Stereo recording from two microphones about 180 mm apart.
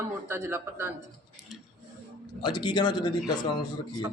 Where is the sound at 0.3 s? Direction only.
15° right (ahead or behind).